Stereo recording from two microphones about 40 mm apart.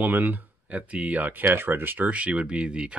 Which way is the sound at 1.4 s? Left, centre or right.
Right.